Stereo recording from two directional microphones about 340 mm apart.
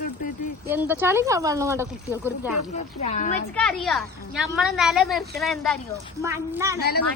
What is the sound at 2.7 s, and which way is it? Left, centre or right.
Speech, centre.